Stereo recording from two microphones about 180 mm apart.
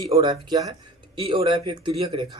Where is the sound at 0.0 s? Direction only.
30° right (ahead or behind).